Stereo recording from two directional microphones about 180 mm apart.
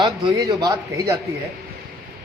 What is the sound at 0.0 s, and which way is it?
A man's voice, 25° right (ahead or behind).